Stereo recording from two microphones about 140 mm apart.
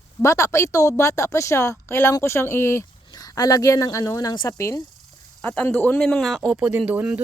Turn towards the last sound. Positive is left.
turn(degrees=-10)  # may be behind; listen again after turning